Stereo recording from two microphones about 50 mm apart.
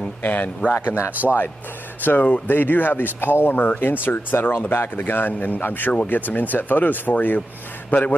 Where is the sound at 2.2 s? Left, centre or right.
Left.